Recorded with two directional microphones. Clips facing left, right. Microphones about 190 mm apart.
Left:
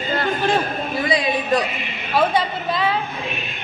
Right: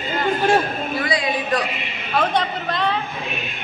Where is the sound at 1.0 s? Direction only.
25° left (ahead or behind).